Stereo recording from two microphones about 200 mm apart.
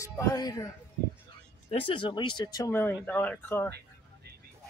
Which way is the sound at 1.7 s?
25° left (ahead or behind).